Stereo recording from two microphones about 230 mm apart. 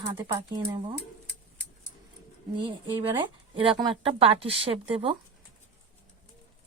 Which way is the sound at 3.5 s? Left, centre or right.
Right.